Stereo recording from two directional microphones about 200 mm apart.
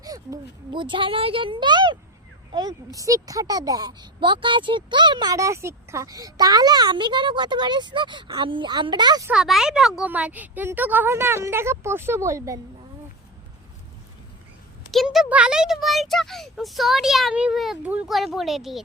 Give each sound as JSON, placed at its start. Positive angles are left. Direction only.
{"t": 0.0, "sound": "speech", "side_deg": -20}
{"t": 9.3, "sound": "speech", "side_deg": 0}
{"t": 14.9, "sound": "a child's voice", "side_deg": 0}